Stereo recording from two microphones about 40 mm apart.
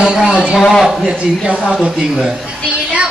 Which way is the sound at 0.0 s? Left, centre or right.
Centre.